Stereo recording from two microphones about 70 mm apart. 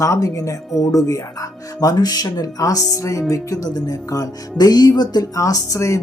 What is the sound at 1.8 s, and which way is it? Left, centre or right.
Speech, left.